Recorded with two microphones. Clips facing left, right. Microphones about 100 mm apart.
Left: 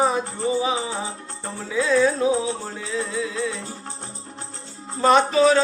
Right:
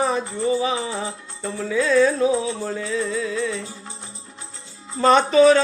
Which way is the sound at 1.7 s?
10° left (ahead or behind).